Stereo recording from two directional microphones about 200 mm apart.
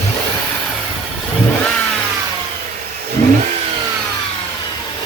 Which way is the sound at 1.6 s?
5° left (ahead or behind).